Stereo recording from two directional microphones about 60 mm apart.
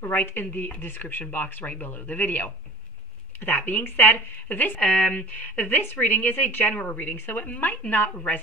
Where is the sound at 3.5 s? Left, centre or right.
Left.